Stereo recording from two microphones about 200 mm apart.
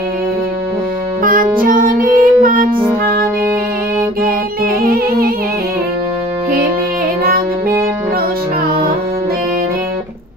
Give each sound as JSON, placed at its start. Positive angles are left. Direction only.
{"t": 1.2, "sound": "music", "side_deg": -45}
{"t": 4.8, "sound": "music", "side_deg": -50}
{"t": 8.6, "sound": "music", "side_deg": -50}